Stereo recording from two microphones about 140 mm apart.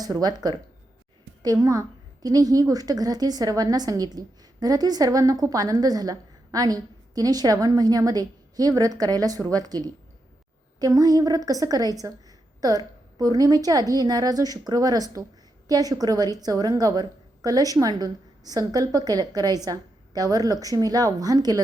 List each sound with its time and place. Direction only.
0.0 s a woman's voice: 30° right (ahead or behind)